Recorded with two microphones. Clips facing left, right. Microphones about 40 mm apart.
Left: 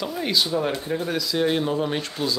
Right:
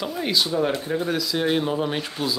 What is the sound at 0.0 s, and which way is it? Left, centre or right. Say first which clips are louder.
A man's voice: even; centre.